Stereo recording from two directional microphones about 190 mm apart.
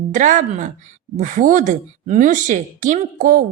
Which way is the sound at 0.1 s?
40° right (ahead or behind).